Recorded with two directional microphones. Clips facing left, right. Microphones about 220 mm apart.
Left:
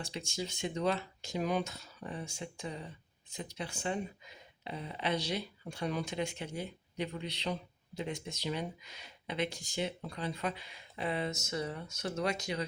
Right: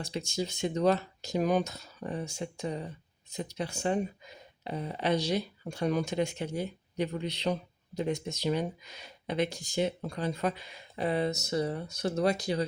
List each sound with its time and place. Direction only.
0.0 s speech: 40° right (ahead or behind)